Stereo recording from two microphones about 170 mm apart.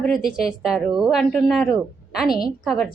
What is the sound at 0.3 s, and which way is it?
A woman's voice, 5° right (ahead or behind).